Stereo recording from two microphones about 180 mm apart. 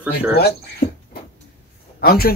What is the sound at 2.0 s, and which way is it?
Speech, 60° left (ahead or behind).